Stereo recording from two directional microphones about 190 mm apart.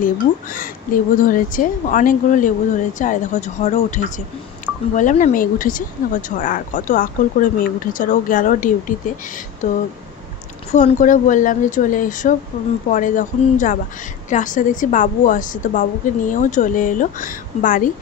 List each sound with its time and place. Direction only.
0.0 s speech: 45° left (ahead or behind)
10.7 s speech: 40° left (ahead or behind)